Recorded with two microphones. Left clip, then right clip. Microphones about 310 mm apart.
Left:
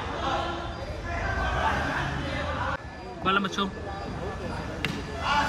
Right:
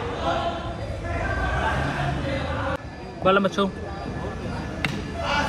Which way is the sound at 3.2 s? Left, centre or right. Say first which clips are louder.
Right 6 dB; centre.